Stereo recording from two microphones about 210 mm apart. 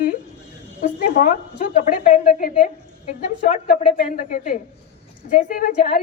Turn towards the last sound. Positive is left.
turn(degrees=45)  # may be behind; listen again after turning